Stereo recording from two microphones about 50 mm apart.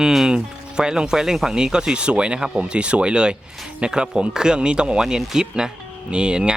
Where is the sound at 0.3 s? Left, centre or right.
Centre.